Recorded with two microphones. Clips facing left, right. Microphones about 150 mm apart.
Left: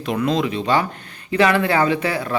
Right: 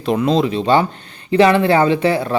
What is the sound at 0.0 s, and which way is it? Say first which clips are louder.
Speech: right 4 dB; 30° right (ahead or behind).